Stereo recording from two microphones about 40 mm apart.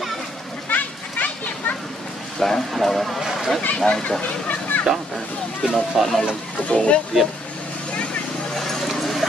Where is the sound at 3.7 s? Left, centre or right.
Left.